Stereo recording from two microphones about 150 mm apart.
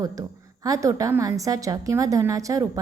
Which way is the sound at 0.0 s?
25° right (ahead or behind).